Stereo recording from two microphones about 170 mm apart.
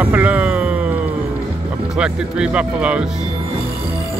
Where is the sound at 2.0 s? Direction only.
5° right (ahead or behind).